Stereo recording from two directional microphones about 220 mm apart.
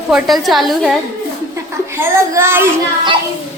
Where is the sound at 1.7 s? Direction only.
10° right (ahead or behind).